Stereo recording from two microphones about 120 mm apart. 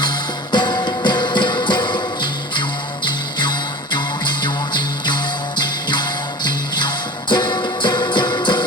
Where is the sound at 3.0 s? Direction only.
40° left (ahead or behind).